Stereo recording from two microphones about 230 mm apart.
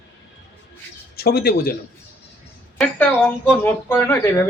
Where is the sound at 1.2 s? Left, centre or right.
Left.